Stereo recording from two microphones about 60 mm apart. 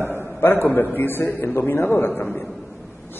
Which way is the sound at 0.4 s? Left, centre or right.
Left.